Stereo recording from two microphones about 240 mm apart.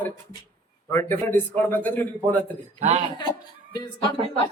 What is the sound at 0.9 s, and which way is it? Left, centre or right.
A man's voice, centre.